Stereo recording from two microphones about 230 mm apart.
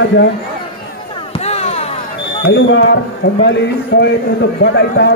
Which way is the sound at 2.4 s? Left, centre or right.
Left.